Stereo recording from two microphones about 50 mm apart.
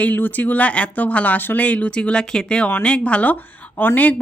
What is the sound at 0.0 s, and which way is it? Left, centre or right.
Speech, left.